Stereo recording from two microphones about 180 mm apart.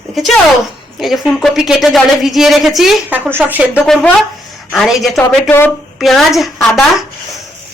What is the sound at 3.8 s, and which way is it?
Speech, centre (ahead or behind).